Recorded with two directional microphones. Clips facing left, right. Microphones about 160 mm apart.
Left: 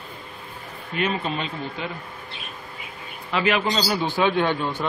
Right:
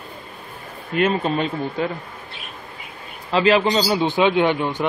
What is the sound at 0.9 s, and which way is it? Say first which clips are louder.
Speech: right 6 dB; 45° right (ahead or behind).